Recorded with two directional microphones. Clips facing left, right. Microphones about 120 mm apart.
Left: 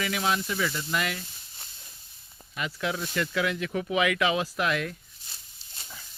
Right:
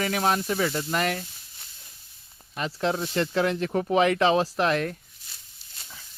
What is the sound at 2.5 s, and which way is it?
Speech, 35° right (ahead or behind).